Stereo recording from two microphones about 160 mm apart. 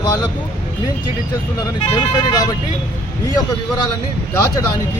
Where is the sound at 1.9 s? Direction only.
25° left (ahead or behind).